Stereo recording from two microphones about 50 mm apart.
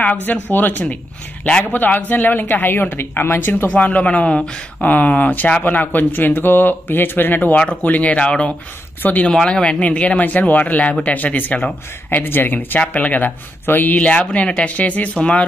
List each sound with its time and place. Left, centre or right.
0.2 s a man's voice: left
3.7 s speech: left
4.8 s a man's voice: left
9.0 s a man's voice: left
9.3 s speech: centre
9.7 s a man's voice: left
12.2 s speech: left
12.8 s a man's voice: left
14.0 s speech: left